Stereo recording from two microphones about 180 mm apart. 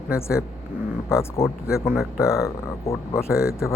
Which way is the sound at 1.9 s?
5° right (ahead or behind).